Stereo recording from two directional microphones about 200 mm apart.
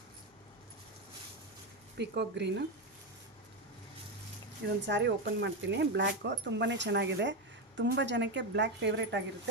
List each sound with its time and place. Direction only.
2.0 s speech: 60° right (ahead or behind)
4.9 s speech: 60° right (ahead or behind)